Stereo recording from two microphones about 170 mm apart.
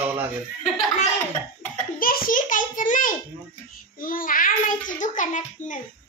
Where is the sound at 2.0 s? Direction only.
55° left (ahead or behind).